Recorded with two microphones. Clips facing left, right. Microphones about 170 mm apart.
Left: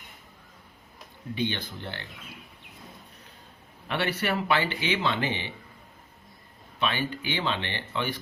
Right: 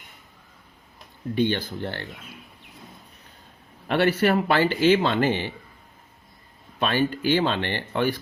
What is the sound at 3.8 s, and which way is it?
Speech, 55° right (ahead or behind).